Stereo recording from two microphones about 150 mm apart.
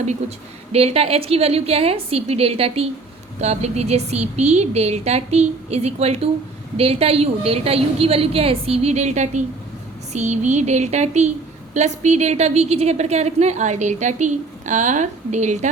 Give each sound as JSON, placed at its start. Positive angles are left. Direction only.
{"t": 0.0, "sound": "a woman's voice", "side_deg": -45}